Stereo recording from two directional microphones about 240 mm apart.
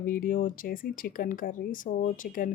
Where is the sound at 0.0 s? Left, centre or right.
Left.